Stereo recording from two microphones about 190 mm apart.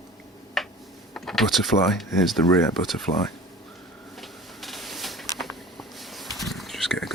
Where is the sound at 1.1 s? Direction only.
Centre (ahead or behind).